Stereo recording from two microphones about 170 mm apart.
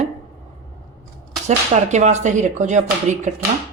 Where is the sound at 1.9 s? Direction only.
45° right (ahead or behind).